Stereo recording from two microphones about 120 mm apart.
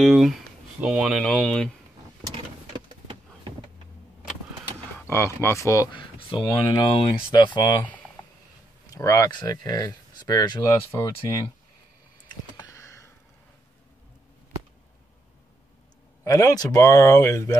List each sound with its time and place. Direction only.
0.0 s speech: centre (ahead or behind)
1.2 s speech: 5° left (ahead or behind)
5.0 s speech: 20° left (ahead or behind)
5.9 s speech: 45° left (ahead or behind)
8.9 s speech: 30° left (ahead or behind)
12.7 s a sound: 25° left (ahead or behind)
16.3 s speech: 30° left (ahead or behind)